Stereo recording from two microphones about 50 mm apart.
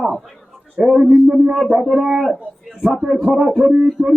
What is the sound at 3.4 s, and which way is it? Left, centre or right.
Speech, centre.